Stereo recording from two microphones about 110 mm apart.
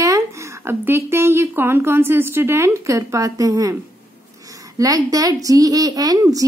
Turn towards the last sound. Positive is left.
turn(degrees=-35)  # may be behind; listen again after turning